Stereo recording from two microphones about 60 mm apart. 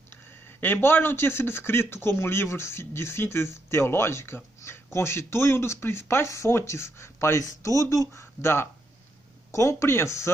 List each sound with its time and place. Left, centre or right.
0.6 s speech: left
7.4 s speech: left